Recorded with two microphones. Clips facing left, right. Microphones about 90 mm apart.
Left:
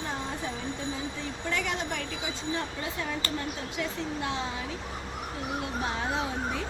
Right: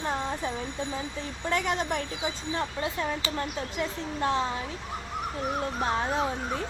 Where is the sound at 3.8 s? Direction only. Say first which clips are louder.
Right 2 dB; 40° right (ahead or behind).